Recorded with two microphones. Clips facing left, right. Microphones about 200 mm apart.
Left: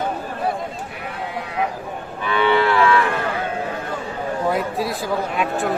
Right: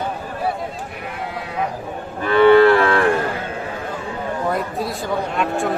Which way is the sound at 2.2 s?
45° right (ahead or behind).